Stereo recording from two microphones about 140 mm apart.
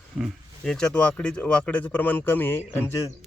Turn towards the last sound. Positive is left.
turn(degrees=15)  # may be behind; listen again after turning